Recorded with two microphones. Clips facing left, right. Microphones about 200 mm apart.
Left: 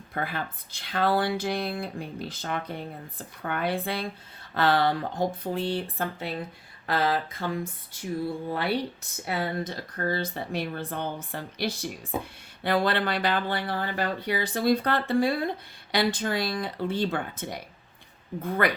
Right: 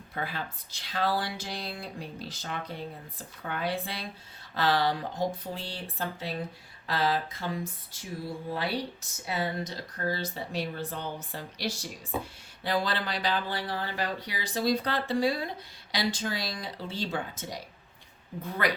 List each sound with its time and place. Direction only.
0.1 s speech: 55° left (ahead or behind)